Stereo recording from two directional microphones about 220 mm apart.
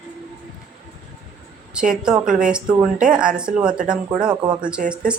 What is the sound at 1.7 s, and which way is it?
A woman's voice, 5° right (ahead or behind).